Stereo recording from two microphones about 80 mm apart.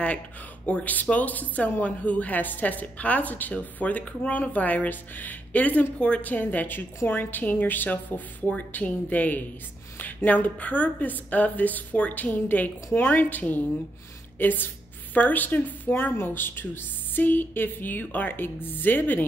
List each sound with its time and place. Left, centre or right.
0.7 s speech: centre